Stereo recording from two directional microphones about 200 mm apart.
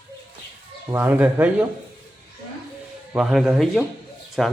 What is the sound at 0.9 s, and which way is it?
Speech, 10° right (ahead or behind).